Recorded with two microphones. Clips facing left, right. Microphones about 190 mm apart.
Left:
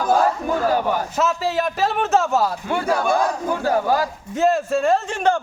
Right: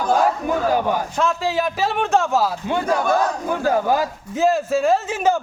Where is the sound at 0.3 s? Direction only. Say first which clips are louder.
Even; 15° right (ahead or behind).